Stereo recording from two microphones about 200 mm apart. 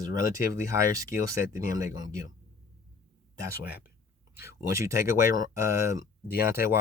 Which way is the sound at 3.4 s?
5° right (ahead or behind).